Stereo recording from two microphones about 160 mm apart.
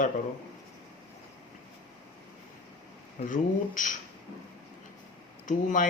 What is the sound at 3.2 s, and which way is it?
Speech, 55° left (ahead or behind).